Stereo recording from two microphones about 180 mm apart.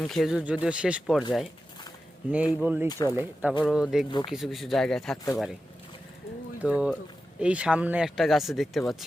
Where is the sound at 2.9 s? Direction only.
20° left (ahead or behind).